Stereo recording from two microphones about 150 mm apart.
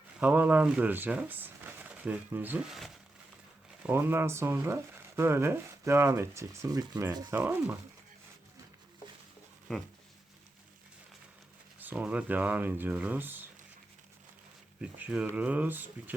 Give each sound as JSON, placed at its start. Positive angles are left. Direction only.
{"t": 0.2, "sound": "speech", "side_deg": -10}
{"t": 3.8, "sound": "speech", "side_deg": -15}
{"t": 7.3, "sound": "speech", "side_deg": -15}
{"t": 9.7, "sound": "a sound", "side_deg": 5}
{"t": 11.8, "sound": "speech", "side_deg": -10}
{"t": 14.8, "sound": "speech", "side_deg": -10}